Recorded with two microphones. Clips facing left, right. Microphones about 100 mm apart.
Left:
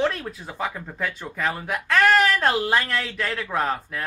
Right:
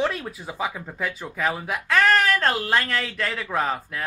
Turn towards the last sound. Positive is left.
turn(degrees=0)  # may be behind; listen again after turning